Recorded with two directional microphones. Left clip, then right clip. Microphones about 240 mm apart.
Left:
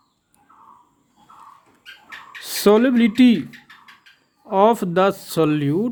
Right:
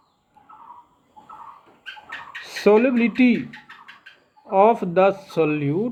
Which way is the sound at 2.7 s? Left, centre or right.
Left.